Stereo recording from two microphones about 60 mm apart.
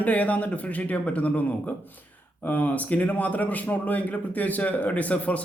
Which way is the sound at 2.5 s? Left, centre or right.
Left.